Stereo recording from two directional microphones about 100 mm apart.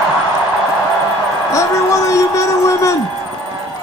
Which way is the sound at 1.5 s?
30° left (ahead or behind).